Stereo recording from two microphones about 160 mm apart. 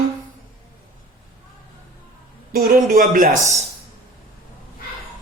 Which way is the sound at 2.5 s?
65° right (ahead or behind).